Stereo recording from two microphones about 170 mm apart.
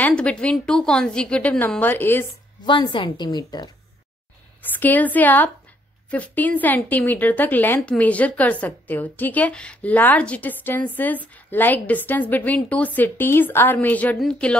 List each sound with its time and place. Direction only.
0.0 s a woman's voice: 5° left (ahead or behind)
2.6 s a woman's voice: 25° left (ahead or behind)
4.7 s a woman's voice: 10° left (ahead or behind)